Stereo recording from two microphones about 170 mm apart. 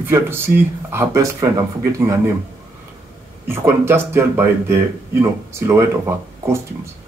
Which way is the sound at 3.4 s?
15° right (ahead or behind).